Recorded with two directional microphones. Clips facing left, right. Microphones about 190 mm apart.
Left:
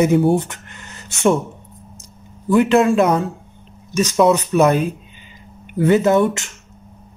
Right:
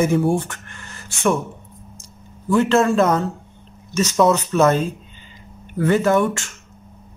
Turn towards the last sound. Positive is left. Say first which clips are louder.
# left 2 dB
turn(degrees=20)  # may be behind; listen again after turning